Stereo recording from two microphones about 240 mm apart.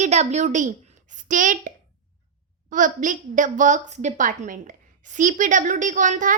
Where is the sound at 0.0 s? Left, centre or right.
Right.